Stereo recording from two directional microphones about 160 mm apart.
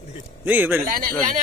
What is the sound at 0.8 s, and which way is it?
Speech, 60° right (ahead or behind).